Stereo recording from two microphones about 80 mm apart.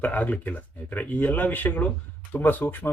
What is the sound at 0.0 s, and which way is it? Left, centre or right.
Speech, centre.